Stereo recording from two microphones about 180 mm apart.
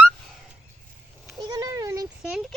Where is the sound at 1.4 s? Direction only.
20° right (ahead or behind).